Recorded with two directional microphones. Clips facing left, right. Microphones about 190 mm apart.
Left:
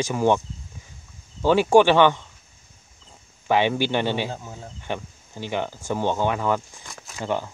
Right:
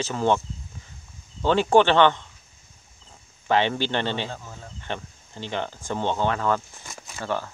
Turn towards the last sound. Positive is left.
turn(degrees=15)  # may be behind; listen again after turning